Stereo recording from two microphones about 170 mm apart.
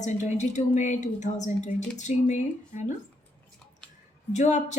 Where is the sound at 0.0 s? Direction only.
45° left (ahead or behind).